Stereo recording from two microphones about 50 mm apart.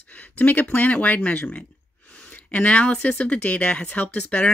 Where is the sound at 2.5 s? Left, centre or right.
Left.